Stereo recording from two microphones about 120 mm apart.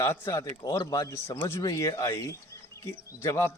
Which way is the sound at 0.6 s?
35° left (ahead or behind).